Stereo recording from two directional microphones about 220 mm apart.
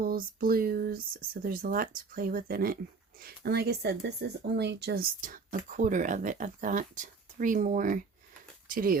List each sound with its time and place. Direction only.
0.0 s speech: 40° right (ahead or behind)